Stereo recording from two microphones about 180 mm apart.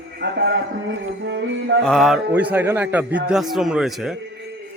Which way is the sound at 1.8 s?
Centre (ahead or behind).